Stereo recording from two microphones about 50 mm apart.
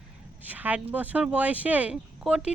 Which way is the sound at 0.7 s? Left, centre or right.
Right.